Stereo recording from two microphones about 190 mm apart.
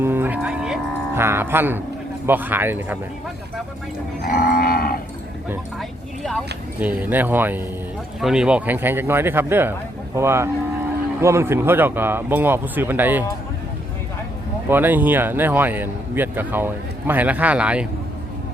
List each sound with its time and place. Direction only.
0.0 s speech: 10° right (ahead or behind)
4.2 s livestock: 50° left (ahead or behind)
6.7 s speech: 10° right (ahead or behind)
14.7 s speech: 10° right (ahead or behind)